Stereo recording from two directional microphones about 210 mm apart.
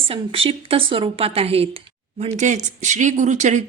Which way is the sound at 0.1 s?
25° right (ahead or behind).